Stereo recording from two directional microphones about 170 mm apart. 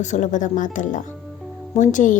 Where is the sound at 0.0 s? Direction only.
45° left (ahead or behind).